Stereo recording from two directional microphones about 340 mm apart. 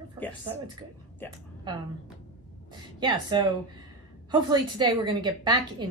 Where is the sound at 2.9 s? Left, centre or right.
Centre.